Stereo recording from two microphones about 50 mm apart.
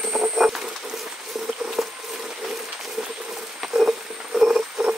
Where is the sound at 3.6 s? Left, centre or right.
Centre.